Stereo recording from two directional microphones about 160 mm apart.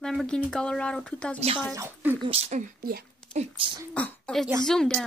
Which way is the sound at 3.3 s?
40° right (ahead or behind).